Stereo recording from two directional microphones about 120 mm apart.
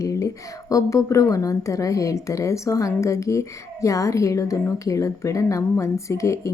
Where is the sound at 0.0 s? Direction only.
25° left (ahead or behind).